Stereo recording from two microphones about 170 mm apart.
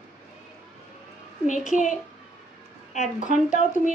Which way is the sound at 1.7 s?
50° left (ahead or behind).